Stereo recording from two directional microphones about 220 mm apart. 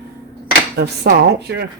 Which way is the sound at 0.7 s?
50° right (ahead or behind).